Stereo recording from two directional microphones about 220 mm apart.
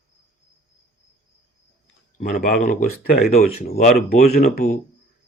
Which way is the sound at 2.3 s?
45° left (ahead or behind).